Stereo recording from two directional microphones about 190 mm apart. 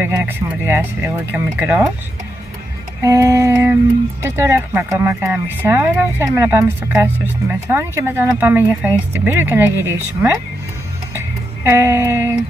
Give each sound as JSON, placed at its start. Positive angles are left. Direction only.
{"t": 0.0, "sound": "speech", "side_deg": -10}
{"t": 3.0, "sound": "music", "side_deg": -15}
{"t": 4.4, "sound": "speech", "side_deg": -10}
{"t": 11.1, "sound": "music", "side_deg": -15}